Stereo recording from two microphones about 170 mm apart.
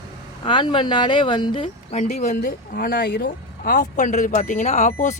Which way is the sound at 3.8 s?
45° left (ahead or behind).